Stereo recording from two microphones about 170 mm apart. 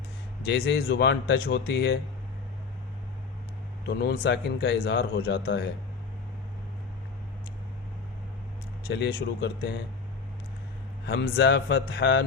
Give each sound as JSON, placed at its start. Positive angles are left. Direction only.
{"t": 0.4, "sound": "speech", "side_deg": 80}
{"t": 3.8, "sound": "speech", "side_deg": 75}
{"t": 8.9, "sound": "speech", "side_deg": 90}
{"t": 11.0, "sound": "speech", "side_deg": 85}